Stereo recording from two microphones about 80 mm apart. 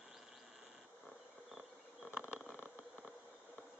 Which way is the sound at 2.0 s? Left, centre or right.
Centre.